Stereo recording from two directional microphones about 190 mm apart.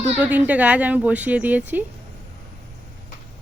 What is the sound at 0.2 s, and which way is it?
Speech, 10° right (ahead or behind).